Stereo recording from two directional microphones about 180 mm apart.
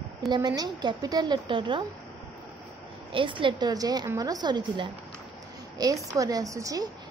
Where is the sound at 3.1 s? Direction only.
30° right (ahead or behind).